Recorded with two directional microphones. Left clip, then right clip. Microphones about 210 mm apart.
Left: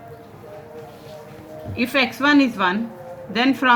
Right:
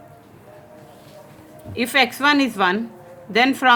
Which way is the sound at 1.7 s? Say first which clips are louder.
Right 2 dB; 35° right (ahead or behind).